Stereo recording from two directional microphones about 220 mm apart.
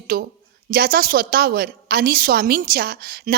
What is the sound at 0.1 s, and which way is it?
A woman's voice, 45° right (ahead or behind).